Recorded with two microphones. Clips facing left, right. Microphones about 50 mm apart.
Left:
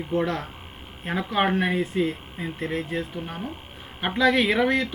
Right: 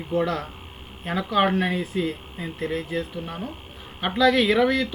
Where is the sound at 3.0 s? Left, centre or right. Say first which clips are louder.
Right 1 dB; centre.